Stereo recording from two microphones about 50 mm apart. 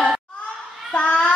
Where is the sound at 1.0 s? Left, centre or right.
Left.